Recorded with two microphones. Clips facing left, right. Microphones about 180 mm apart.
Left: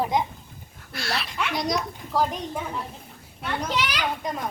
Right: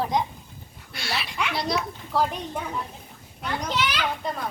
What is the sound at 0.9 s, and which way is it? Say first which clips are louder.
Speech: left 1 dB; centre (ahead or behind).